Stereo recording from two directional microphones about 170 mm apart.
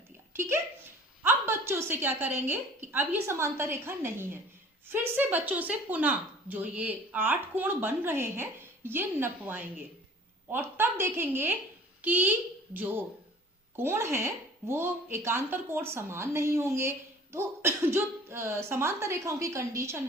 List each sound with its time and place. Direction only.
0.3 s a woman's voice: 15° right (ahead or behind)